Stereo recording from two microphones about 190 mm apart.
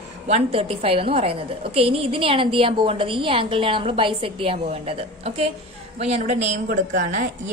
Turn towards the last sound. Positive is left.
turn(degrees=-45)  # may be behind; listen again after turning